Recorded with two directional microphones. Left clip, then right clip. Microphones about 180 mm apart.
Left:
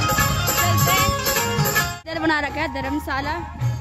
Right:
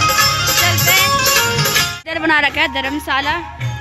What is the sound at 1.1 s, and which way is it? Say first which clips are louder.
Music: right 8 dB; 60° left (ahead or behind).